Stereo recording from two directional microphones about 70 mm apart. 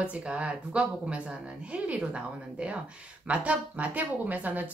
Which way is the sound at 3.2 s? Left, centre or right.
Centre.